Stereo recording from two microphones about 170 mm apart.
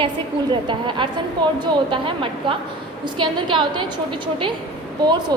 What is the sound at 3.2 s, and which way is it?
Speech, 30° right (ahead or behind).